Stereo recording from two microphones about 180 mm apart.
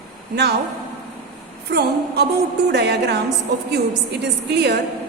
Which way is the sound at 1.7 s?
65° right (ahead or behind).